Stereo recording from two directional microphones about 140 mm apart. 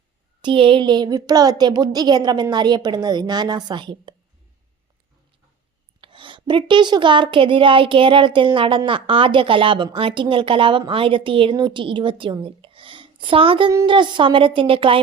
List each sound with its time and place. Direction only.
0.4 s a woman's voice: 40° right (ahead or behind)
6.0 s a woman's voice: 35° right (ahead or behind)